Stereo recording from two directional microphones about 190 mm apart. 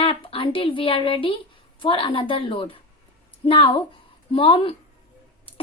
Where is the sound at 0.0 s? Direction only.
30° left (ahead or behind).